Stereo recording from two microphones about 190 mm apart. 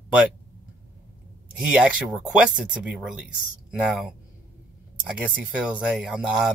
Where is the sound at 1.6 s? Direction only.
5° right (ahead or behind).